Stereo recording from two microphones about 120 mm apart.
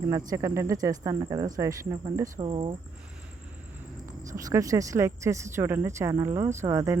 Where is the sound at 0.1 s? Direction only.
30° right (ahead or behind).